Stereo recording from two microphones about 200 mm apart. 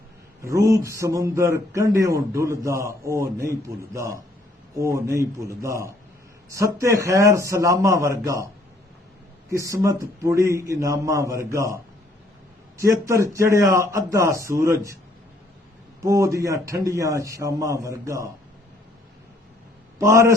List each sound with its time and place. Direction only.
0.4 s a man's voice: 15° right (ahead or behind)
9.5 s a man's voice: 15° right (ahead or behind)
12.8 s a man's voice: 15° right (ahead or behind)
16.0 s a man's voice: 15° right (ahead or behind)